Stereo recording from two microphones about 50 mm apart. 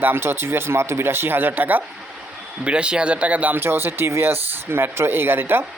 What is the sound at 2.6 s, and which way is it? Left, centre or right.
Speech, right.